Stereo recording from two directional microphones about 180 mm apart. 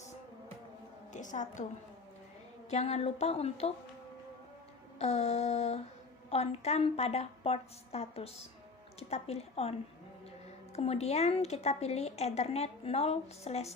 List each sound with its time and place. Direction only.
1.1 s a woman's voice: 45° left (ahead or behind)
2.6 s a woman's voice: 35° left (ahead or behind)
4.9 s a woman's voice: 35° left (ahead or behind)
10.8 s a woman's voice: 35° left (ahead or behind)